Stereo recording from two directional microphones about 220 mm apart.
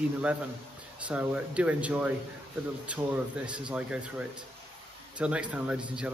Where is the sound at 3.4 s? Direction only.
5° right (ahead or behind).